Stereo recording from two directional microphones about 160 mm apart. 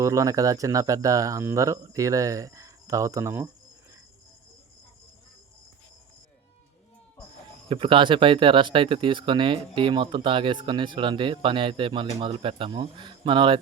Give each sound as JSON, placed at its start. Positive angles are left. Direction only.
{"t": 0.0, "sound": "speech", "side_deg": -20}
{"t": 7.7, "sound": "speech", "side_deg": -30}